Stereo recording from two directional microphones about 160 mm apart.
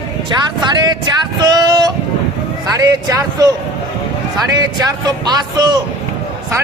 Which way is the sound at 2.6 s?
20° right (ahead or behind).